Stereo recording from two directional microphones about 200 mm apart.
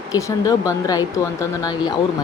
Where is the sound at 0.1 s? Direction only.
15° left (ahead or behind).